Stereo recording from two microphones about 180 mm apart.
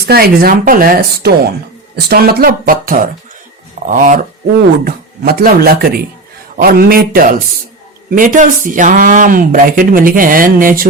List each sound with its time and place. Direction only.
0.0 s speech: 60° right (ahead or behind)